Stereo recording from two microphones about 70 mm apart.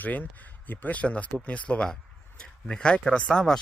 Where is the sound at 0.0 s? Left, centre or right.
Left.